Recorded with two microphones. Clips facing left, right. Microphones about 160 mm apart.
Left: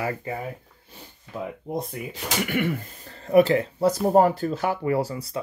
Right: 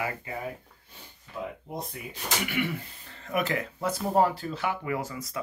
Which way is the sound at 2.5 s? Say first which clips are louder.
Left 5 dB; 50° left (ahead or behind).